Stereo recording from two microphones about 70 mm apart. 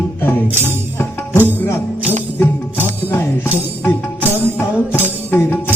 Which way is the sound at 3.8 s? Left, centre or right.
Left.